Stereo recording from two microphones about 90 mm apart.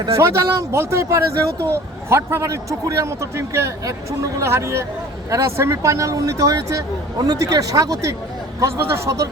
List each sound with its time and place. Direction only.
0.2 s a man's voice: 30° right (ahead or behind)
8.6 s a man's voice: 30° right (ahead or behind)